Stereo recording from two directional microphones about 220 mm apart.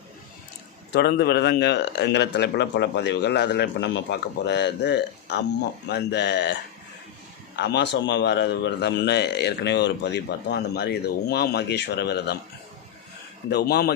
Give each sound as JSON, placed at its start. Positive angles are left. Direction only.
{"t": 0.9, "sound": "a man's voice", "side_deg": 45}
{"t": 13.5, "sound": "a man's voice", "side_deg": 45}